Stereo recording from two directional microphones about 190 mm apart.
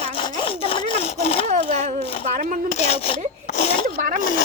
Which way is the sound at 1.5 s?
40° right (ahead or behind).